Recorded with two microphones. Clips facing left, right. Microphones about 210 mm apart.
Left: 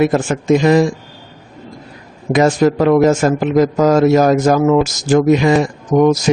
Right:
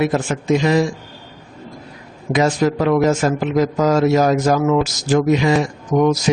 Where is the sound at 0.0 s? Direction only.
50° left (ahead or behind).